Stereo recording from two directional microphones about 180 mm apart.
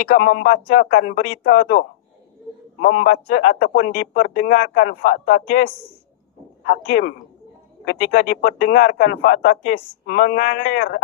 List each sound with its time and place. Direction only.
0.0 s a man's voice: 50° left (ahead or behind)